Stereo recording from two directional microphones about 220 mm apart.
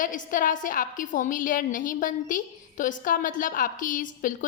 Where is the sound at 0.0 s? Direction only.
35° left (ahead or behind).